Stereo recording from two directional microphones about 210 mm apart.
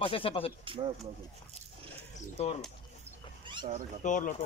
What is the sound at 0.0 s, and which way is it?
Speech, 25° left (ahead or behind).